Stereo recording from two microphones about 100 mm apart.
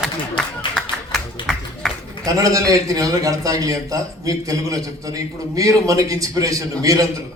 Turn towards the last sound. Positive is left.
turn(degrees=-35)  # may be behind; listen again after turning